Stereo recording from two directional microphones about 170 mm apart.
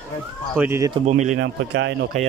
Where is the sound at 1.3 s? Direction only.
90° right.